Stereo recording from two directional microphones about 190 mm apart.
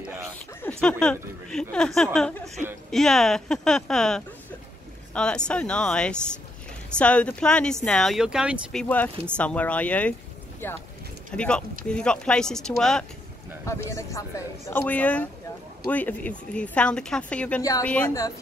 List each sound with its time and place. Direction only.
0.6 s speech: 5° left (ahead or behind)
8.8 s speech: 10° left (ahead or behind)
13.8 s speech: 15° left (ahead or behind)